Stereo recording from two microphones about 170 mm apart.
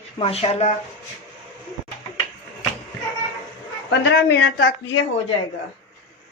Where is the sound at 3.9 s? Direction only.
85° left.